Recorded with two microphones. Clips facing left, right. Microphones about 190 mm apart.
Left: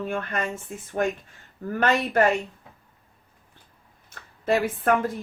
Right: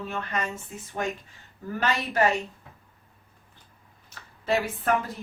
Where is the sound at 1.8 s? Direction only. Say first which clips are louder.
Left 4 dB; 55° left (ahead or behind).